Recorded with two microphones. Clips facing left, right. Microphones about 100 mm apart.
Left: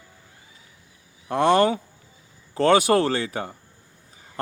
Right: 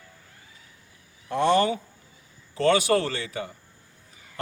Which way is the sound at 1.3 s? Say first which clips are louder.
Left 3 dB; 55° left (ahead or behind).